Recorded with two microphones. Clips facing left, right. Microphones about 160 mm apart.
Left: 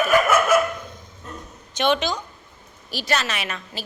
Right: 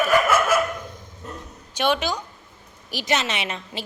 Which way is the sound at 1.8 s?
10° right (ahead or behind).